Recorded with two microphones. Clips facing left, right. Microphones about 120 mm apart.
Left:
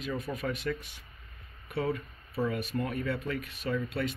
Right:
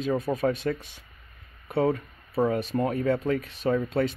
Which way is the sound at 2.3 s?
50° right (ahead or behind).